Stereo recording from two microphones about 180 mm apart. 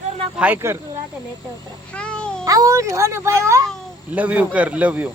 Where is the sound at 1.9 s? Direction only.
5° left (ahead or behind).